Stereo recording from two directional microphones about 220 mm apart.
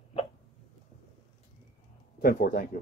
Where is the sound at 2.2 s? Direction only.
45° left (ahead or behind).